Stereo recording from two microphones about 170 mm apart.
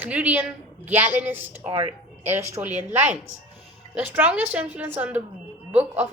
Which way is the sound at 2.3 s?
15° right (ahead or behind).